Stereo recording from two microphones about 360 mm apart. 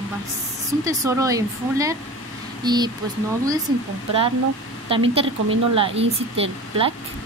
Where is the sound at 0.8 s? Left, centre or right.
Centre.